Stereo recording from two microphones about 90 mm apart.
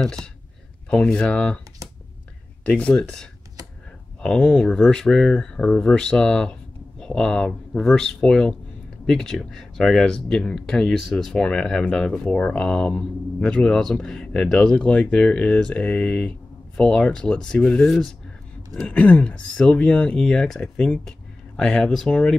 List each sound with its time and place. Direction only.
0.0 s speech: 5° left (ahead or behind)
2.6 s speech: 15° left (ahead or behind)